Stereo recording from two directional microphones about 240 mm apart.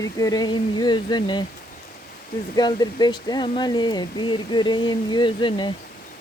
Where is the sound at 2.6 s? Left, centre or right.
Centre.